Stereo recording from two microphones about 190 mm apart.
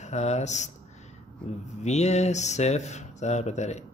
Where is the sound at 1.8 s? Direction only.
35° left (ahead or behind).